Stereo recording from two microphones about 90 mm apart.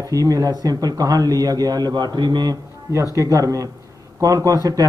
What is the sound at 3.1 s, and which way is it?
Speech, 40° right (ahead or behind).